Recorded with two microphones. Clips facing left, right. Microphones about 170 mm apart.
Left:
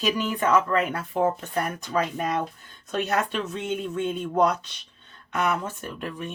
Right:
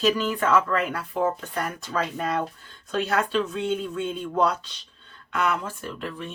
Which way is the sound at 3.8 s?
20° left (ahead or behind).